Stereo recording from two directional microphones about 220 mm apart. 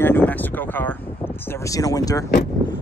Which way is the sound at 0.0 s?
10° left (ahead or behind).